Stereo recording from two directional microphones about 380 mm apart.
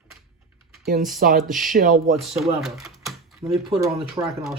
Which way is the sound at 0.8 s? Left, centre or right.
Right.